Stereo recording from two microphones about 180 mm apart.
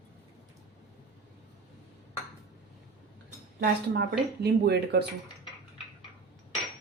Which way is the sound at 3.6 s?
65° right (ahead or behind).